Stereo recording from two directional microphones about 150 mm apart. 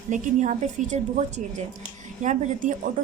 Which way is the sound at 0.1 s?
50° right (ahead or behind).